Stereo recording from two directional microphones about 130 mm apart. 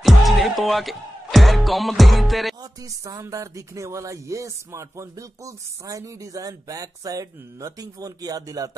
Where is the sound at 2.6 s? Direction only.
25° right (ahead or behind).